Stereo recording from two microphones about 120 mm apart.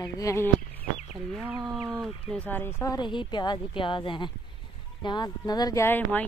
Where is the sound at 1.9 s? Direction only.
10° left (ahead or behind).